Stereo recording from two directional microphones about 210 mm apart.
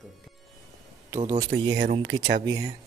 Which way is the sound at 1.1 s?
20° right (ahead or behind).